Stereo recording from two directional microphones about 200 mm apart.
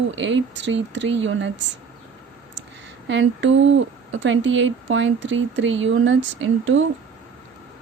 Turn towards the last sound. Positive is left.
turn(degrees=-75)  # may be behind; listen again after turning